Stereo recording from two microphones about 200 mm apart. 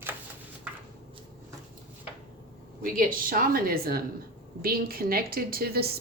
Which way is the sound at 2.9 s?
45° right (ahead or behind).